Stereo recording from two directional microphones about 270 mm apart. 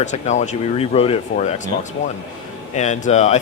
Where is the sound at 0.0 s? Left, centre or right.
Left.